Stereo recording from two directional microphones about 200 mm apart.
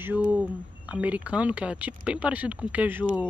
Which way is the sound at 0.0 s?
10° right (ahead or behind).